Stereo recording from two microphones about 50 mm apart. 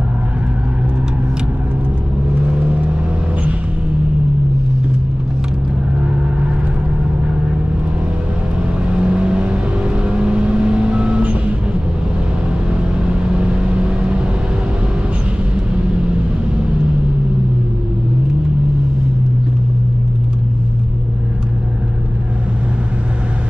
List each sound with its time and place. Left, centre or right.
2.3 s vehicle: right
8.8 s vehicle: right
12.9 s vehicle: right